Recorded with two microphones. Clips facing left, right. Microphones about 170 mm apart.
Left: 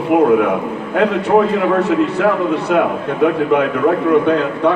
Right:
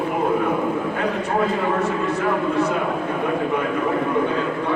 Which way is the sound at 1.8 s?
70° left (ahead or behind).